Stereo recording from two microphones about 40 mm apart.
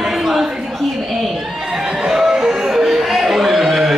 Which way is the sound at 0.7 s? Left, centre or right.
Centre.